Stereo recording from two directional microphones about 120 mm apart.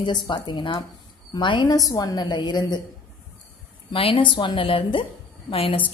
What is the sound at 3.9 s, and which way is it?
Speech, 45° left (ahead or behind).